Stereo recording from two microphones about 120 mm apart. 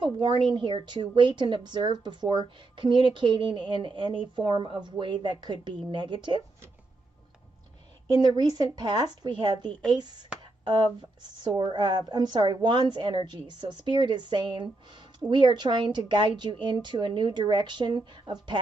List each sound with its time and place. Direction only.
0.0 s a woman's voice: 40° right (ahead or behind)
8.2 s a woman's voice: 35° right (ahead or behind)
11.4 s a woman's voice: 40° right (ahead or behind)